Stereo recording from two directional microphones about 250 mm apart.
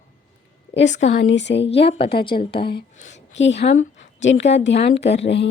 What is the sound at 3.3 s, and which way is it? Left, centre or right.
Speech, left.